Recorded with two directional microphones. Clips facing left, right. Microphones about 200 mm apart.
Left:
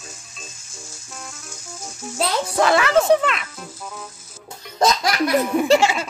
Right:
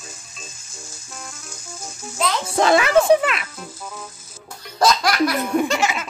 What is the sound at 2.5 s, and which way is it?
Speech, 20° right (ahead or behind).